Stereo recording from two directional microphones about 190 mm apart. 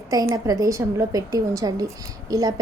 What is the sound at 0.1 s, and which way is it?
A woman's voice, 20° right (ahead or behind).